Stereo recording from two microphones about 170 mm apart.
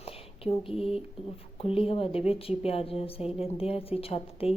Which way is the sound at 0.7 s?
35° left (ahead or behind).